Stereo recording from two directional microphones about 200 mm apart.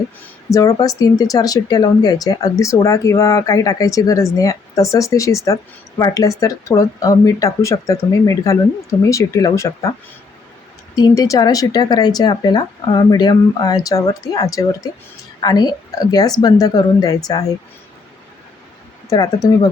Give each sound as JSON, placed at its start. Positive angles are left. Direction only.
{"t": 0.5, "sound": "speech", "side_deg": 15}
{"t": 10.9, "sound": "a woman's voice", "side_deg": 20}
{"t": 19.1, "sound": "speech", "side_deg": 20}